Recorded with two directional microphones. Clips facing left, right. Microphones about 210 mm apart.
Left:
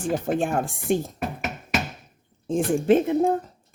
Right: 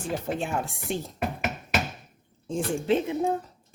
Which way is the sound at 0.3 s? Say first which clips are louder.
Left 5 dB; 50° left (ahead or behind).